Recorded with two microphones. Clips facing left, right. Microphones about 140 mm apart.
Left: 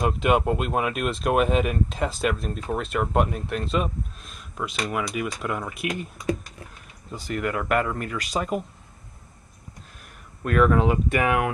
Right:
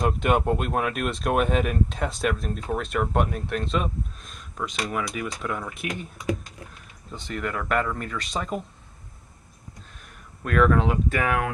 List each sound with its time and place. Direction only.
0.0 s speech: centre (ahead or behind)
7.1 s speech: 5° left (ahead or behind)
10.4 s speech: 5° left (ahead or behind)
11.1 s speech: 15° left (ahead or behind)